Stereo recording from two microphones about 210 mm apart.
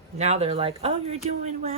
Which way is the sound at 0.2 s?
30° right (ahead or behind).